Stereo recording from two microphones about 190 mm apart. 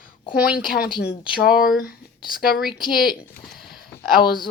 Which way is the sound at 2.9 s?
Centre (ahead or behind).